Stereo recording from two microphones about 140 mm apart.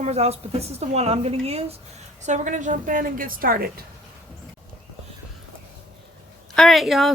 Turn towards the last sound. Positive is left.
turn(degrees=0)  # may be behind; listen again after turning